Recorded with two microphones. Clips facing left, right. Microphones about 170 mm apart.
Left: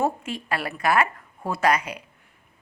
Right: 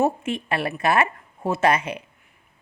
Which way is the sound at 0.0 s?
25° right (ahead or behind).